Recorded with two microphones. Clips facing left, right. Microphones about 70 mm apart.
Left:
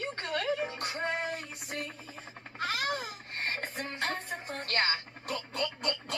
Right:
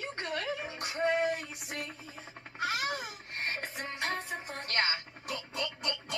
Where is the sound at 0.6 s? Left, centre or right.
Left.